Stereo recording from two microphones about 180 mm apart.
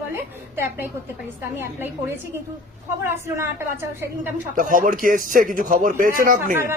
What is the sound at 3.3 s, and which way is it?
Speech, 15° right (ahead or behind).